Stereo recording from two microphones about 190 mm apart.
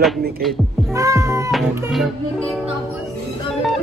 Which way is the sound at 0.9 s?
15° right (ahead or behind).